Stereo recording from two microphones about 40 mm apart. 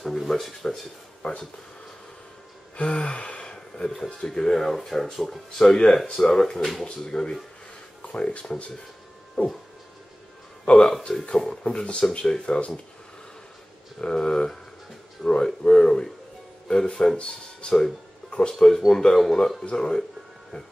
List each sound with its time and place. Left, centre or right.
0.0 s speech: centre
1.2 s speech: left
2.7 s gasp: left
3.3 s a sound: left
4.3 s speech: centre
5.6 s speech: centre
8.0 s speech: left
10.6 s speech: left
11.6 s speech: left
12.5 s gasp: left
14.0 s speech: centre
18.5 s speech: centre